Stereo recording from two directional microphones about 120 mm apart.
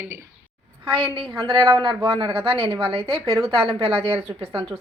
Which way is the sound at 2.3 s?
45° right (ahead or behind).